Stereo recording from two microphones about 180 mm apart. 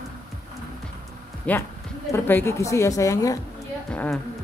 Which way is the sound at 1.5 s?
10° left (ahead or behind).